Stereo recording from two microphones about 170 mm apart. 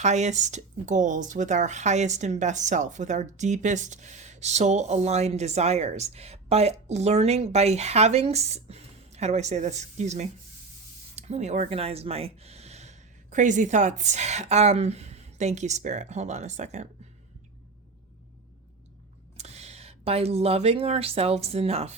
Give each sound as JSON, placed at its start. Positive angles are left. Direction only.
{"t": 0.0, "sound": "speech", "side_deg": -45}
{"t": 19.4, "sound": "speech", "side_deg": -40}